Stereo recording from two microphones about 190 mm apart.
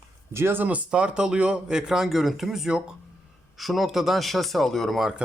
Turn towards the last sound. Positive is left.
turn(degrees=0)  # may be behind; listen again after turning